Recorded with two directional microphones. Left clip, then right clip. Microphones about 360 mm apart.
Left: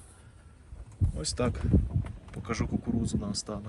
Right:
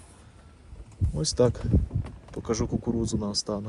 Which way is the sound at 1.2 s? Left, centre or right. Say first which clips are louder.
Right 8 dB; centre.